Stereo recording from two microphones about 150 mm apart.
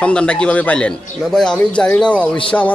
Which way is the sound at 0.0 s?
5° left (ahead or behind).